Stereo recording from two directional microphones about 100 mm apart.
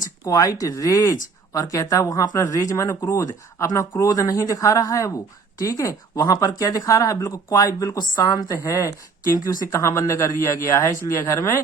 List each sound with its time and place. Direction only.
0.3 s speech: 35° left (ahead or behind)